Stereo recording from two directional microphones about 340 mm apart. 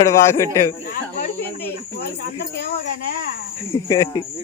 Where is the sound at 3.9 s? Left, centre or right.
Centre.